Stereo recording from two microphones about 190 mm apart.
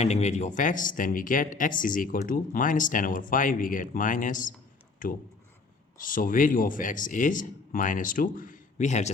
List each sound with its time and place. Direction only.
0.0 s speech: 35° left (ahead or behind)